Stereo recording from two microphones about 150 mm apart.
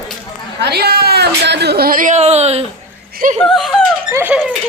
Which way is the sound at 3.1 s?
65° right (ahead or behind).